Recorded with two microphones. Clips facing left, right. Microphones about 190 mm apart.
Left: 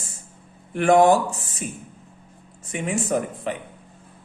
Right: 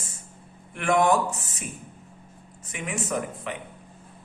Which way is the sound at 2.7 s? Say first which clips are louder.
Left 6 dB; 30° left (ahead or behind).